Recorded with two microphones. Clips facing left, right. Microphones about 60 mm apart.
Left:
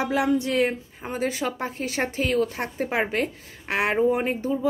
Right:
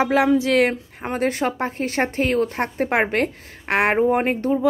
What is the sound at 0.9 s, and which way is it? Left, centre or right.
A woman's voice, right.